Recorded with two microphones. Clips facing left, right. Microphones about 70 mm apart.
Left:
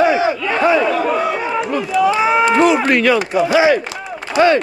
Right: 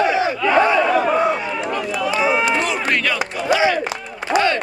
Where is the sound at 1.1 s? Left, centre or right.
Centre.